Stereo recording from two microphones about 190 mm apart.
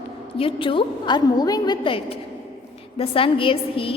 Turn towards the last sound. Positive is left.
turn(degrees=30)  # may be behind; listen again after turning